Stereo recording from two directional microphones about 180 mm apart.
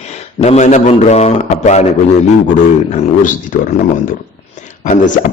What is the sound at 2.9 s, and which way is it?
Speech, 45° left (ahead or behind).